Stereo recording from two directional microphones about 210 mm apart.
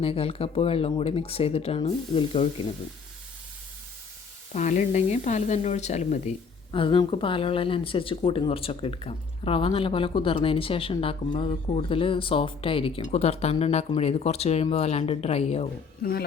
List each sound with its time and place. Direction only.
0.0 s speech: 25° left (ahead or behind)
4.5 s speech: 35° left (ahead or behind)
16.0 s speech: 50° left (ahead or behind)